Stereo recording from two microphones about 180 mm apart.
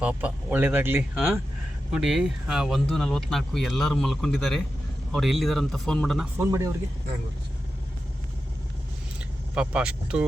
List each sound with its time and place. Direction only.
0.0 s speech: 5° right (ahead or behind)
6.3 s speech: 15° right (ahead or behind)
9.6 s speech: 5° right (ahead or behind)